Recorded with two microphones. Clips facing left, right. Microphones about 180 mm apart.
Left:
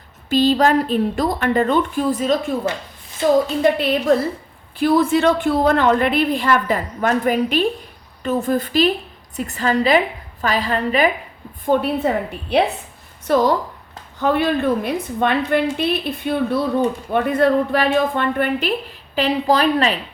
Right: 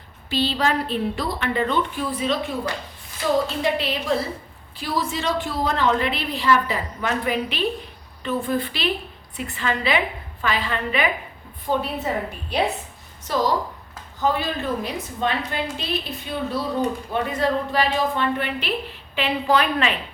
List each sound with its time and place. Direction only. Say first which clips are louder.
0.3 s a woman's voice: left 7 dB; 45° left (ahead or behind)
2.7 s a woman's voice: left 5 dB; 25° left (ahead or behind)
3.6 s a woman's voice: left 7 dB; 50° left (ahead or behind)
11.6 s a woman's voice: left 7 dB; 55° left (ahead or behind)
19.1 s a woman's voice: left 4 dB; 35° left (ahead or behind)